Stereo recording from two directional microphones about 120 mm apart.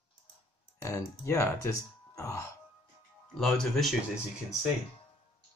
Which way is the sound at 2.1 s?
25° left (ahead or behind).